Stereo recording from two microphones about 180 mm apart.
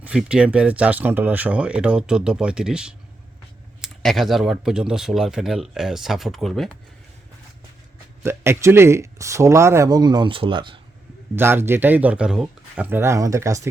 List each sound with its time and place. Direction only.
0.0 s speech: 5° right (ahead or behind)
8.2 s speech: 15° right (ahead or behind)
11.3 s speech: 10° right (ahead or behind)